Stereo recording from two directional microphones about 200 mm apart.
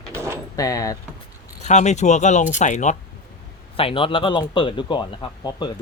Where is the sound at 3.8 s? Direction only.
25° left (ahead or behind).